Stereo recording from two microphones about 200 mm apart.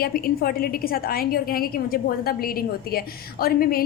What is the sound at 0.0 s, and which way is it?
A woman's voice, 50° left (ahead or behind).